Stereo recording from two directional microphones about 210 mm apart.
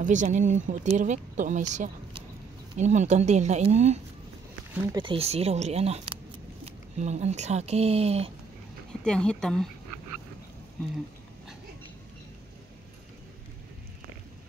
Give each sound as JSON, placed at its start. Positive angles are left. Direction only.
{"t": 0.0, "sound": "speech", "side_deg": -35}
{"t": 9.0, "sound": "speech", "side_deg": 5}